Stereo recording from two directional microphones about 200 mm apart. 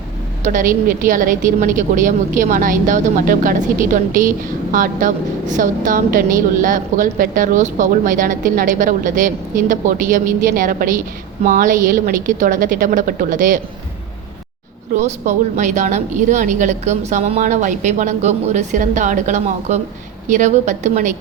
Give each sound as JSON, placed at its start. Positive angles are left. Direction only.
{"t": 0.4, "sound": "a woman's voice", "side_deg": -40}
{"t": 14.9, "sound": "a woman's voice", "side_deg": -35}